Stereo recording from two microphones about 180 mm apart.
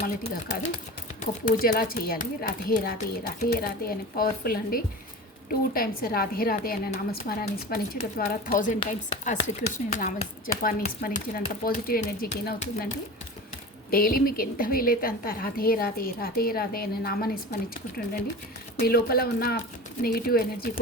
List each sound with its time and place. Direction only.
0.0 s a woman's voice: 60° left (ahead or behind)
13.9 s a woman's voice: 50° left (ahead or behind)